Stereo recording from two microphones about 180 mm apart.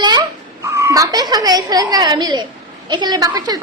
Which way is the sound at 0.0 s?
20° right (ahead or behind).